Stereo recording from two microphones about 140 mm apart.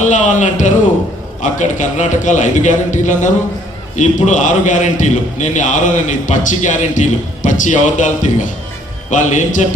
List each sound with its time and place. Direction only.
0.1 s a man's voice: 60° left (ahead or behind)